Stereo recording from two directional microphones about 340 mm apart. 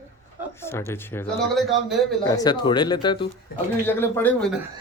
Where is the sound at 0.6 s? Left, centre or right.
Centre.